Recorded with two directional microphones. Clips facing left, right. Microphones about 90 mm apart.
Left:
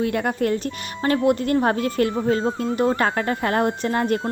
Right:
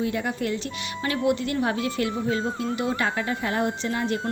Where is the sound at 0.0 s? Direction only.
55° left (ahead or behind).